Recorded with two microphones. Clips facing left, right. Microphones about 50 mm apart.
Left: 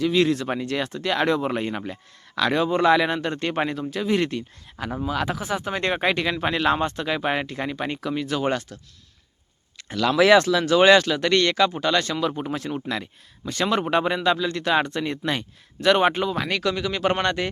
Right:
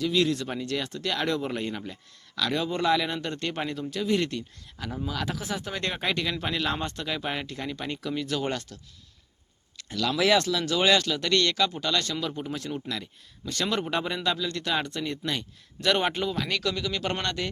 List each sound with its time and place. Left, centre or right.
0.0 s speech: left
0.6 s speech: left
1.8 s speech: left
3.2 s speech: left
6.8 s speech: left
7.1 s speech: left; by 8.8 s centre
9.7 s a sound: left
10.1 s speech: left
10.4 s speech: left
13.5 s speech: left
13.9 s speech: left
15.8 s speech: centre